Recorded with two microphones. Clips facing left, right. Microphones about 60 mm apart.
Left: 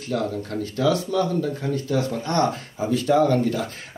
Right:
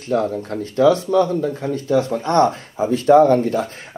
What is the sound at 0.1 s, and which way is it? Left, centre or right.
Speech, right.